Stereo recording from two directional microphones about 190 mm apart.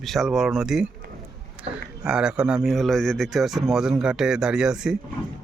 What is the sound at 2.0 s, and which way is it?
Speech, 5° right (ahead or behind).